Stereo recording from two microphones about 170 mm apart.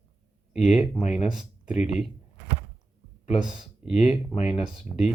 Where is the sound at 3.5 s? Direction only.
5° right (ahead or behind).